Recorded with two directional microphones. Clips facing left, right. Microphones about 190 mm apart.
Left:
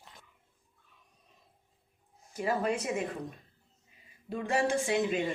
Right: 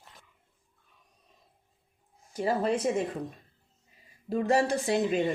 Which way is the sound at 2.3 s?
30° right (ahead or behind).